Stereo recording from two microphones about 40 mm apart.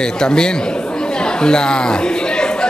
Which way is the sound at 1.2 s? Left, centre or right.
Left.